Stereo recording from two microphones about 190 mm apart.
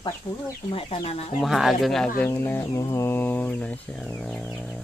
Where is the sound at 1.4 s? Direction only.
Centre (ahead or behind).